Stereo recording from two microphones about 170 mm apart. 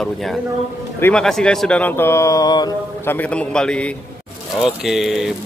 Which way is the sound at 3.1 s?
10° left (ahead or behind).